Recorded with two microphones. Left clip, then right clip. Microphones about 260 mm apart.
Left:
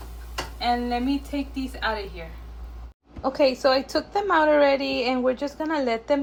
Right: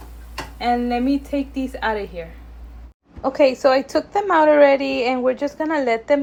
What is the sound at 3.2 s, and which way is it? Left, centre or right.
A woman's voice, centre.